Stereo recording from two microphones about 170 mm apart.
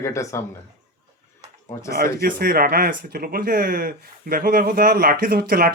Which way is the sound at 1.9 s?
60° right (ahead or behind).